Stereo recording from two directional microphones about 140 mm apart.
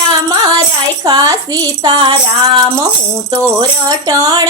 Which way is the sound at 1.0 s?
30° right (ahead or behind).